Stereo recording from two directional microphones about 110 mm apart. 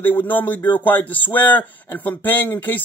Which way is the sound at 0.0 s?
20° left (ahead or behind).